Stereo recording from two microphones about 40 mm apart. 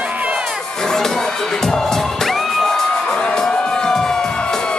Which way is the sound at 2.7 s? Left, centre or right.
Left.